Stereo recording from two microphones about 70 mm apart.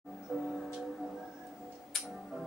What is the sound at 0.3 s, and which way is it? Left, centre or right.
Music, centre.